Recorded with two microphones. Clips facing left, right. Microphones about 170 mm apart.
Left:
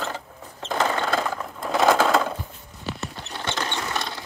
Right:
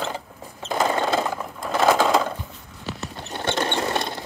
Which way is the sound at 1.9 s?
5° right (ahead or behind).